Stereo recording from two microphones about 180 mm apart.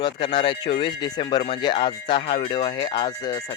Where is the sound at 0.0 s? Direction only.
25° left (ahead or behind).